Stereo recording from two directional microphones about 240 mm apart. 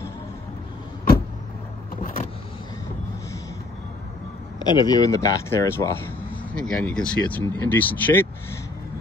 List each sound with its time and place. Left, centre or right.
2.0 s vehicle: left
4.6 s speech: centre